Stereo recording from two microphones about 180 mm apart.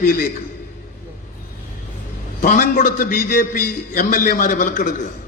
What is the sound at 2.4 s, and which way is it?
A man's voice, 50° left (ahead or behind).